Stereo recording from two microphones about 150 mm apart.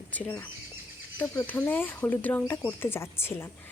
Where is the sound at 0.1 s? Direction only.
10° left (ahead or behind).